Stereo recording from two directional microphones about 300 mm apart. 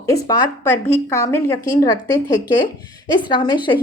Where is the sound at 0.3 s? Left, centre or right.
Centre.